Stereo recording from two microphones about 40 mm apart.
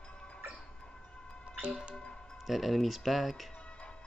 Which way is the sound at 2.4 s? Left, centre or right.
Centre.